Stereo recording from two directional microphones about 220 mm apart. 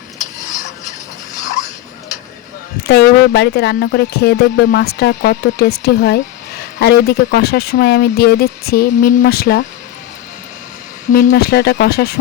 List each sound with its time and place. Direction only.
2.8 s speech: 50° left (ahead or behind)
11.1 s speech: 45° left (ahead or behind)